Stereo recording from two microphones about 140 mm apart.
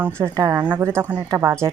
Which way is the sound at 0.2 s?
20° right (ahead or behind).